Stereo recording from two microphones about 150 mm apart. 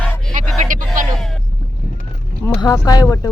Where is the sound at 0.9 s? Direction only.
Centre (ahead or behind).